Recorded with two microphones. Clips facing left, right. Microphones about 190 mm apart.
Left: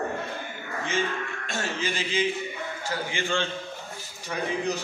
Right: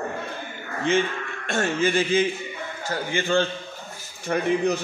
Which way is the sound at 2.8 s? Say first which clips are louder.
Right 5 dB; 40° right (ahead or behind).